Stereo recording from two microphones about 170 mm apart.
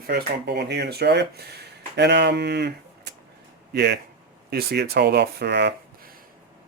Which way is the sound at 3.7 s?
75° right (ahead or behind).